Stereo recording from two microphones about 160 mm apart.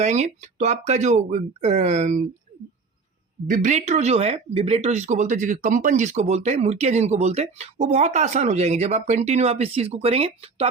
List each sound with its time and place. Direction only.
0.0 s speech: 45° right (ahead or behind)
3.5 s speech: 50° right (ahead or behind)